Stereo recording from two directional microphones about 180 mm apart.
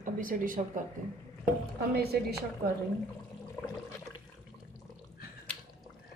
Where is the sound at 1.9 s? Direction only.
60° right (ahead or behind).